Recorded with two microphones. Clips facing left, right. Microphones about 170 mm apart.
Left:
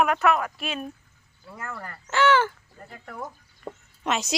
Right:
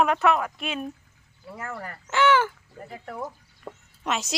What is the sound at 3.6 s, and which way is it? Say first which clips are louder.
Chicken: left 2 dB; centre (ahead or behind).